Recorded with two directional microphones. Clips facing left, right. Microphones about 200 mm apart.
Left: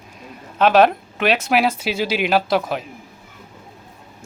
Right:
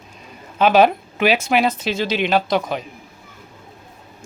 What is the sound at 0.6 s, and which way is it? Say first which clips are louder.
Speech: even; centre (ahead or behind).